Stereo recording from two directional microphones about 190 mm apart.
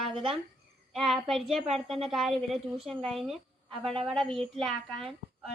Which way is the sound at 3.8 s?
30° right (ahead or behind).